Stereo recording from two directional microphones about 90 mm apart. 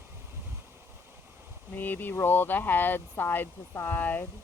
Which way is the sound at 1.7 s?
20° left (ahead or behind).